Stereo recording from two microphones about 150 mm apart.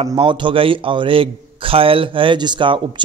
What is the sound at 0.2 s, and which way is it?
A man's voice, 35° right (ahead or behind).